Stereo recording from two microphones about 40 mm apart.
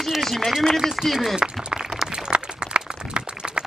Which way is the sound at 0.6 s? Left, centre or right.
Centre.